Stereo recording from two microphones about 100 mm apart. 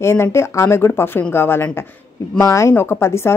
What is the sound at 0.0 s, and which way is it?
A woman's voice, 25° left (ahead or behind).